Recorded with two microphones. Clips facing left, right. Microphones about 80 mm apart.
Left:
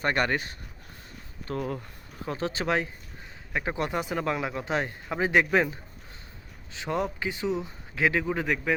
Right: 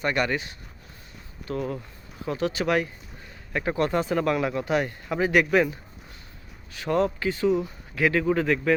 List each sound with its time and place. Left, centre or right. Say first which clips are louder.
0.0 s speech: right 1 dB; left
2.2 s speech: right 4 dB; left
6.7 s a man's voice: right 5 dB; centre